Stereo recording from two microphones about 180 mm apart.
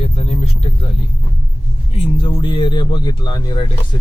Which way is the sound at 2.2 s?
30° left (ahead or behind).